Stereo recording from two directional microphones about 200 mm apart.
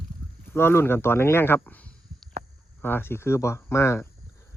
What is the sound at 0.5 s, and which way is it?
Speech, 10° left (ahead or behind).